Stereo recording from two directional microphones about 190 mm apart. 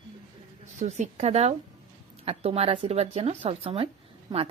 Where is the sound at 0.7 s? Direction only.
40° right (ahead or behind).